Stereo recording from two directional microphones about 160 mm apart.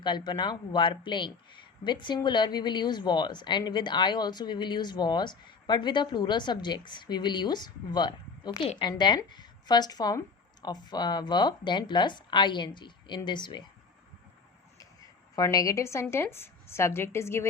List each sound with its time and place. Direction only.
0.0 s a woman's voice: 30° left (ahead or behind)
15.4 s a woman's voice: 20° left (ahead or behind)